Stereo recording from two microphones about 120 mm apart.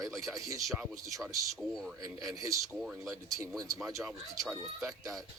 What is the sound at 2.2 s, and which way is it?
Speech, 25° right (ahead or behind).